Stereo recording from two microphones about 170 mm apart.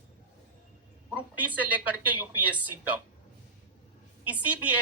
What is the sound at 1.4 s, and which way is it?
A woman's voice, 10° right (ahead or behind).